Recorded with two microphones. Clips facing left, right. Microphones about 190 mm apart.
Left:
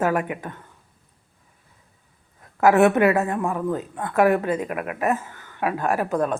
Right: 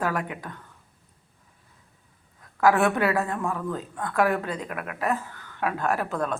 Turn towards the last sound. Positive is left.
turn(degrees=15)  # may be behind; listen again after turning